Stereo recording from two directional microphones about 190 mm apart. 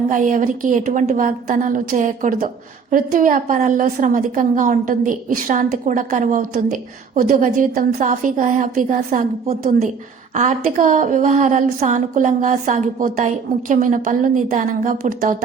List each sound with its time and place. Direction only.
0.1 s a woman's voice: 45° right (ahead or behind)